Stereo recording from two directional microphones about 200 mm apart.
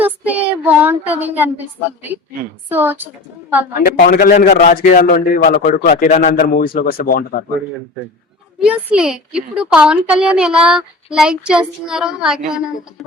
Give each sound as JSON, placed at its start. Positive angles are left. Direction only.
{"t": 0.0, "sound": "child singing", "side_deg": -10}
{"t": 2.6, "sound": "a woman's voice", "side_deg": -10}
{"t": 3.8, "sound": "a man's voice", "side_deg": 50}
{"t": 6.7, "sound": "a man's voice", "side_deg": 45}
{"t": 8.6, "sound": "a woman's voice", "side_deg": -5}